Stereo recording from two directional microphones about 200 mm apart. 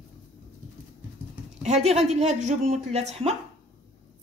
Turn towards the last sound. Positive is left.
turn(degrees=-30)  # may be behind; listen again after turning